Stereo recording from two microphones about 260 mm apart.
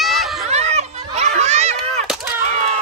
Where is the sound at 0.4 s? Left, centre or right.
Right.